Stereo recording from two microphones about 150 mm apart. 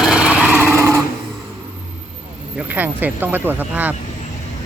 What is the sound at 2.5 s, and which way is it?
Speech, 10° right (ahead or behind).